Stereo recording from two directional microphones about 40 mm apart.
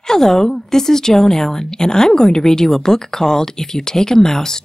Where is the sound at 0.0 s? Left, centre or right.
Centre.